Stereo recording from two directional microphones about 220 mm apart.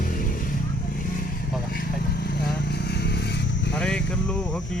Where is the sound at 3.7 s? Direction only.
5° left (ahead or behind).